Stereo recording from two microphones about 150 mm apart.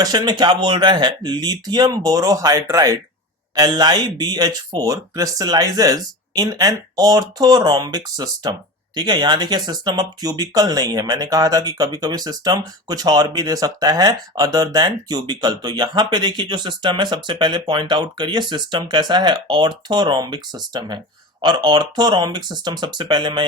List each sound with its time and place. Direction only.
0.0 s speech: 25° right (ahead or behind)